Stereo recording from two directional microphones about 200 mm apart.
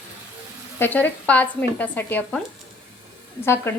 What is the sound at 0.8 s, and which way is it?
Speech, 10° left (ahead or behind).